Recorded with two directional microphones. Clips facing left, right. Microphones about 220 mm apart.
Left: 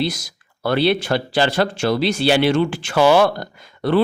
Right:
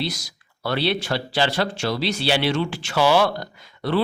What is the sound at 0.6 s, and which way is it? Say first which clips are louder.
A man's voice: left 6 dB; 50° left (ahead or behind).